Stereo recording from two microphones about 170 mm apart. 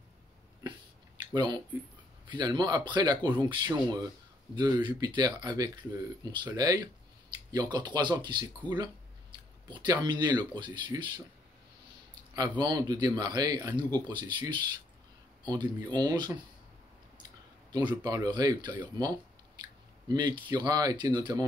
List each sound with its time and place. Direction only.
0.7 s a sound: 25° right (ahead or behind)
2.2 s speech: 25° right (ahead or behind)
12.4 s speech: 25° right (ahead or behind)